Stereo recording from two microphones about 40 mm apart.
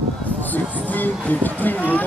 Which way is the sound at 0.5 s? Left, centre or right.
Left.